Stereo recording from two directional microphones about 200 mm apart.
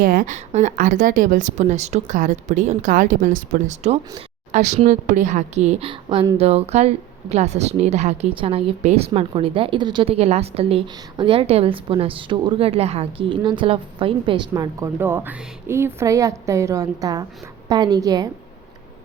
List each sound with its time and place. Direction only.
0.0 s a woman's voice: 45° right (ahead or behind); by 18.3 s 20° right (ahead or behind)